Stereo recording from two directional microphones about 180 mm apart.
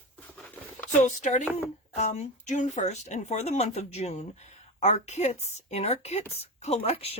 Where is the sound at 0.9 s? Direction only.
40° left (ahead or behind).